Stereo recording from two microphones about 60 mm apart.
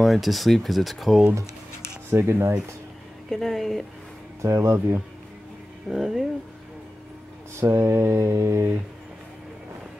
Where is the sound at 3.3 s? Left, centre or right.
Centre.